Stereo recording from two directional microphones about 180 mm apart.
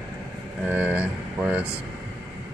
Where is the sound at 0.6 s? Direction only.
10° right (ahead or behind).